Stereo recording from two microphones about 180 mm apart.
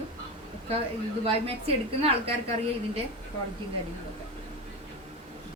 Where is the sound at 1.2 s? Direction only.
35° right (ahead or behind).